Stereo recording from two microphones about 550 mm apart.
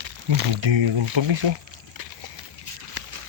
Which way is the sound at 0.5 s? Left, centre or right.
Right.